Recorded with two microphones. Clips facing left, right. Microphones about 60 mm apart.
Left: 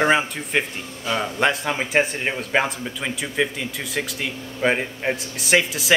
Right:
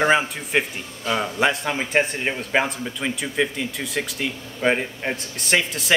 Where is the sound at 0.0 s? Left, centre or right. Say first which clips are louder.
Even; centre.